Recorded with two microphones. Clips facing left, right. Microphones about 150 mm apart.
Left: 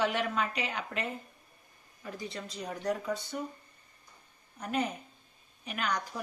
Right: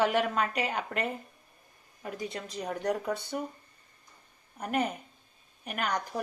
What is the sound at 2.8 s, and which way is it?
Speech, 60° right (ahead or behind).